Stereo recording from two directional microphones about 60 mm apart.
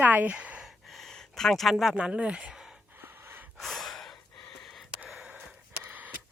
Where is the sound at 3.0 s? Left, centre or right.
Right.